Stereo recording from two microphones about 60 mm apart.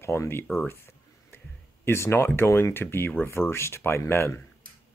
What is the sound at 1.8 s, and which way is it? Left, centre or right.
Speech, left.